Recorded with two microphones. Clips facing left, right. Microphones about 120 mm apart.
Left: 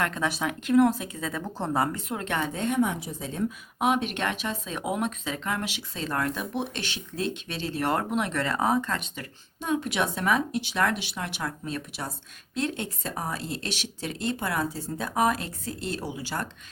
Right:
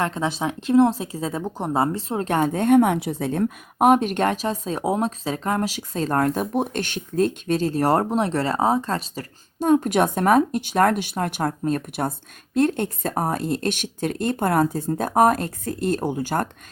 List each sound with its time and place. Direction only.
0.0 s a woman's voice: 25° right (ahead or behind)
1.5 s speech: 15° right (ahead or behind)
1.8 s a woman's voice: 30° right (ahead or behind); by 16.5 s 50° right (ahead or behind)